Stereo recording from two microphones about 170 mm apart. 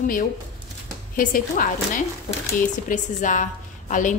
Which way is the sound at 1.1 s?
50° left (ahead or behind).